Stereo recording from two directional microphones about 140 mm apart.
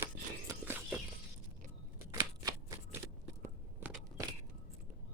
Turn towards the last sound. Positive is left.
turn(degrees=-10)  # may be behind; listen again after turning